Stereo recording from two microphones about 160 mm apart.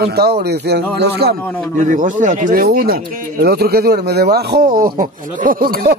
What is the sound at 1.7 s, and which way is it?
Speech, 55° right (ahead or behind).